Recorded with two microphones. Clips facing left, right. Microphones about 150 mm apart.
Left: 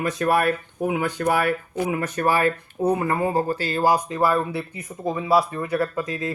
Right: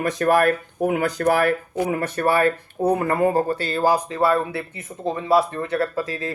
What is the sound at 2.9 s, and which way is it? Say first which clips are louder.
Speech: right 3 dB; 50° right (ahead or behind).